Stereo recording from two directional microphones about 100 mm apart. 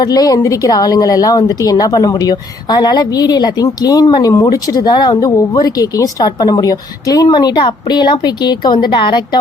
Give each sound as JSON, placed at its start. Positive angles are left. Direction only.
{"t": 0.0, "sound": "a woman's voice", "side_deg": 40}